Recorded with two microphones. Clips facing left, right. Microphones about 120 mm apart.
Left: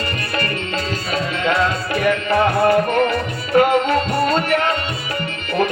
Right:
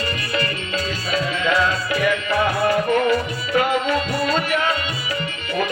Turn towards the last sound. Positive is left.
turn(degrees=55)  # may be behind; listen again after turning